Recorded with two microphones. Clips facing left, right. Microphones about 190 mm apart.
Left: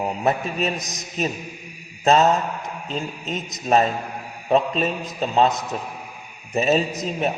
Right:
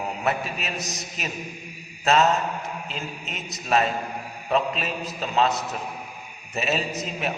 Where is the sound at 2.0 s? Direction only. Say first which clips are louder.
Left 4 dB; 35° left (ahead or behind).